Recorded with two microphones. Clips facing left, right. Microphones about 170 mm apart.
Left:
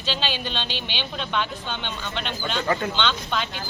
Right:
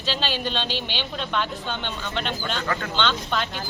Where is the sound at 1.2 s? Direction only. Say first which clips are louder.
Even; centre (ahead or behind).